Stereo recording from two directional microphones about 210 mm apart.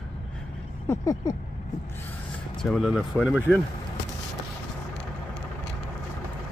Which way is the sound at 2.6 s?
Centre (ahead or behind).